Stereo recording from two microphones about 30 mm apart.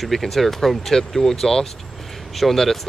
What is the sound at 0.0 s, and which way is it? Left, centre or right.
Speech, centre.